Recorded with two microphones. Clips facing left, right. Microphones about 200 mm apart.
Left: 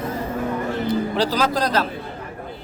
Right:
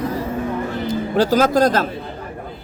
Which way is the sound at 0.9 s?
50° right (ahead or behind).